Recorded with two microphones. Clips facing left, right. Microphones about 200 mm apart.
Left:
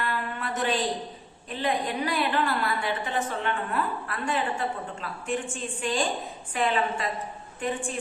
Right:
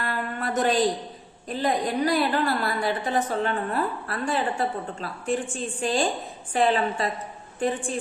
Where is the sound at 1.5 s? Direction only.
40° right (ahead or behind).